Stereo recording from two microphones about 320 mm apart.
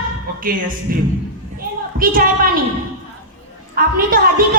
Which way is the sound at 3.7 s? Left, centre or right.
Right.